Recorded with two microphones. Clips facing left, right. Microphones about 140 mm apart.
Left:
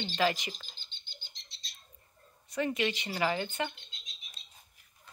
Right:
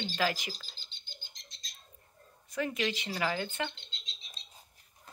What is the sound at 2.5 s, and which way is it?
Speech, centre (ahead or behind).